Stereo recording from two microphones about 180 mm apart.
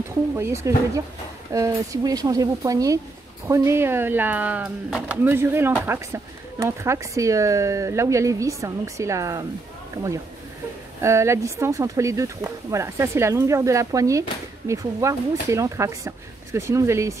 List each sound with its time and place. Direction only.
0.4 s speech: 15° right (ahead or behind)
11.0 s speech: 15° right (ahead or behind)